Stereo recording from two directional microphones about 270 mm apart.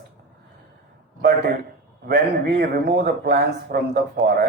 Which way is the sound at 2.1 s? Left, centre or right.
Right.